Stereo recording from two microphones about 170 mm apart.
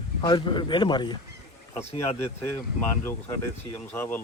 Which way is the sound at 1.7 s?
40° left (ahead or behind).